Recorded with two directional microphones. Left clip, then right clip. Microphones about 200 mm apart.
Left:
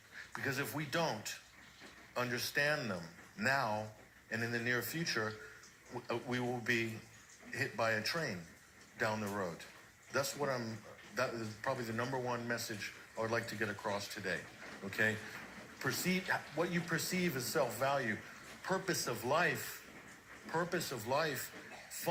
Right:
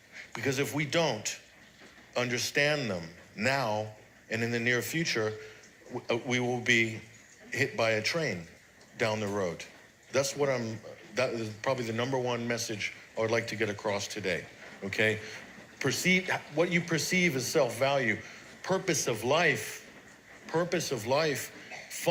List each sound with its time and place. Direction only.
0.3 s speech: 40° right (ahead or behind)